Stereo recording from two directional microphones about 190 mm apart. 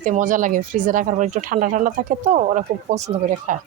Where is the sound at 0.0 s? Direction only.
40° right (ahead or behind).